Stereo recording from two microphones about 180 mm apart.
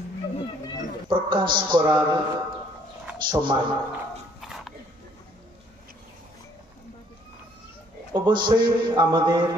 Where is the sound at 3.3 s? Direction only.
25° right (ahead or behind).